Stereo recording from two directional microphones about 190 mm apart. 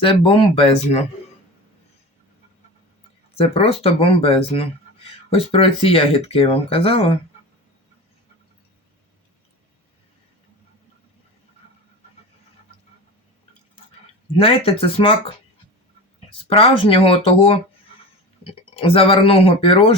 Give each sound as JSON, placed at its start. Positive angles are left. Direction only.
{"t": 0.0, "sound": "speech", "side_deg": 25}
{"t": 3.3, "sound": "speech", "side_deg": 30}
{"t": 14.3, "sound": "speech", "side_deg": 30}
{"t": 16.5, "sound": "speech", "side_deg": 30}
{"t": 18.8, "sound": "speech", "side_deg": 30}